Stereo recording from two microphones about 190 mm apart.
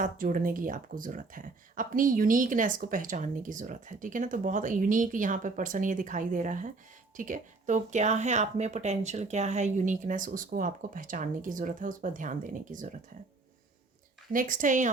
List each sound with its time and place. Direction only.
0.0 s speech: 45° right (ahead or behind)
14.3 s speech: 45° right (ahead or behind)